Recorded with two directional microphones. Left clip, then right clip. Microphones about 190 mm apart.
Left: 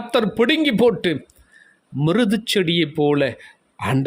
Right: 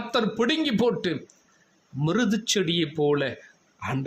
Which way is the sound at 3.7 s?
50° left (ahead or behind).